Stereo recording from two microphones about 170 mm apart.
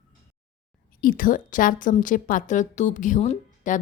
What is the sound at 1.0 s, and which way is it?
A woman's voice, 55° left (ahead or behind).